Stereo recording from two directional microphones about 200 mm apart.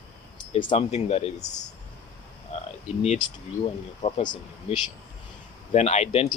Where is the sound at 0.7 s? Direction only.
30° left (ahead or behind).